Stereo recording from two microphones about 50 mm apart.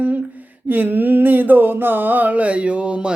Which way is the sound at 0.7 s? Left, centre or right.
Right.